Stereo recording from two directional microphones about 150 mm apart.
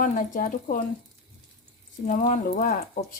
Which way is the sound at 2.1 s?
65° left (ahead or behind).